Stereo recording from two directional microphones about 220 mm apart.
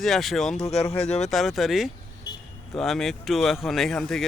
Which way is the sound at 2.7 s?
Centre (ahead or behind).